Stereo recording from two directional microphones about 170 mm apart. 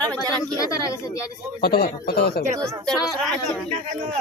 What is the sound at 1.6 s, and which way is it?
Speech, 65° left (ahead or behind).